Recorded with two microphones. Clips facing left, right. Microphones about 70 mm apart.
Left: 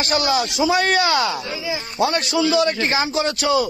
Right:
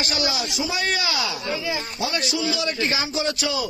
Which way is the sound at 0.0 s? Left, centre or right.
Left.